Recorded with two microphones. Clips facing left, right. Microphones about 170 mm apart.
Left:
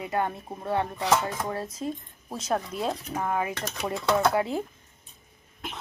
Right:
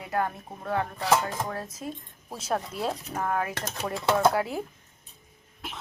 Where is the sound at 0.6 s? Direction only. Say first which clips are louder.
Left 1 dB; 25° left (ahead or behind).